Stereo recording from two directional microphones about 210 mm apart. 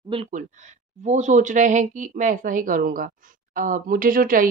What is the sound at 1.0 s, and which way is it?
Speech, 35° right (ahead or behind).